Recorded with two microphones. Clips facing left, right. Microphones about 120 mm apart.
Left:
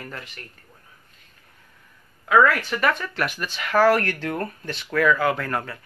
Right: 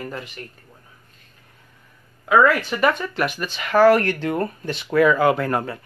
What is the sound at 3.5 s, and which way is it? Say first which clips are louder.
Speech: right 4 dB; centre (ahead or behind).